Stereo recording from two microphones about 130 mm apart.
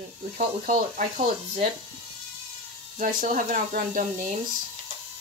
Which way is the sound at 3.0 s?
90° right.